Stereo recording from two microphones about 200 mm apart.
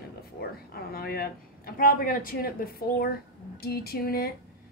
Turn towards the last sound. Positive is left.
turn(degrees=50)  # may be behind; listen again after turning